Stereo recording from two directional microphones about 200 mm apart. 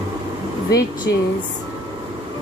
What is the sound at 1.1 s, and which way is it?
Speech, 60° left (ahead or behind).